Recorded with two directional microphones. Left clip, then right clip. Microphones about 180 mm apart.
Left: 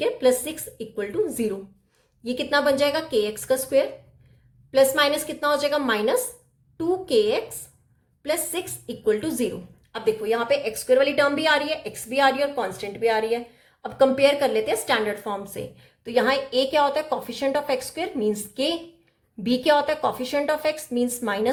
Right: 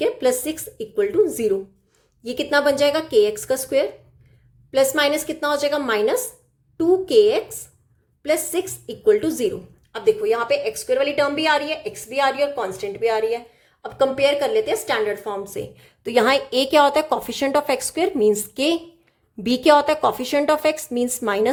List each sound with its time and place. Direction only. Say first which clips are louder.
0.0 s a woman's voice: right 1 dB; 25° right (ahead or behind)
15.7 s a woman's voice: right 4 dB; 30° right (ahead or behind)